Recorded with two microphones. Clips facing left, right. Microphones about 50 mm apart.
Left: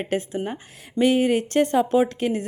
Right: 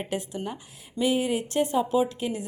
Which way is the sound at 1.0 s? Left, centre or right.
Left.